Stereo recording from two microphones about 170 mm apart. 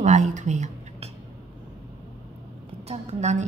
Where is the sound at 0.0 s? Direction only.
45° right (ahead or behind).